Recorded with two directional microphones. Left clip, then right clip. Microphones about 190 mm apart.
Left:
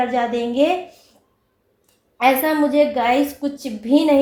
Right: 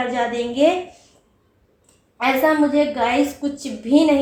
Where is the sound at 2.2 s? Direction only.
40° left (ahead or behind).